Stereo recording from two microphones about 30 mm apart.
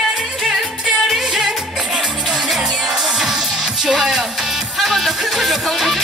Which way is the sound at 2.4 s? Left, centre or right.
Centre.